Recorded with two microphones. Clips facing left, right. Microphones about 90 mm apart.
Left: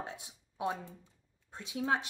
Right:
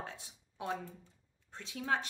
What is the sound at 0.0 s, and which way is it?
Speech, 20° left (ahead or behind).